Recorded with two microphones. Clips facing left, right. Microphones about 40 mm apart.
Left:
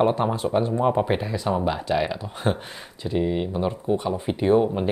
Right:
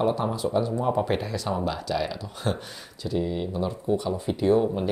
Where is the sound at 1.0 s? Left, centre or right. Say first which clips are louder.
Left 3 dB; centre.